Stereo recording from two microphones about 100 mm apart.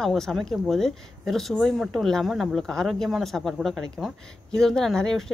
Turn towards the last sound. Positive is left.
turn(degrees=5)  # may be behind; listen again after turning